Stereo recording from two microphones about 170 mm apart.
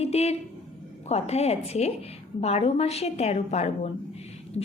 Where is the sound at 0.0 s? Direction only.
40° left (ahead or behind).